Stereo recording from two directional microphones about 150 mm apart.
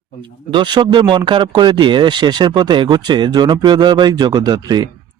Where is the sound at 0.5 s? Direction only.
30° right (ahead or behind).